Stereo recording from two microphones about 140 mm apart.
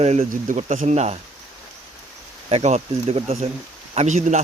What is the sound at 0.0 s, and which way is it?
Speech, 50° right (ahead or behind).